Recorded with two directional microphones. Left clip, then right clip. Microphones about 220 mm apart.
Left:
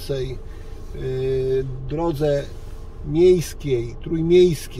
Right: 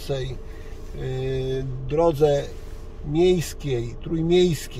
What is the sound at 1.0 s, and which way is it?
A man's voice, 25° right (ahead or behind).